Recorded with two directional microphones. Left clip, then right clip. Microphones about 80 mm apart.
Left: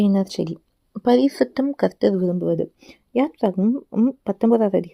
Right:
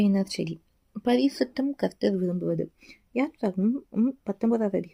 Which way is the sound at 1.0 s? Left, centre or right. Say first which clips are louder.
Left 7 dB; left.